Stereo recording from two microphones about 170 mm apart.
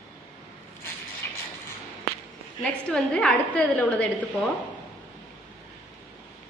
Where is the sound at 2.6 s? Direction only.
5° left (ahead or behind).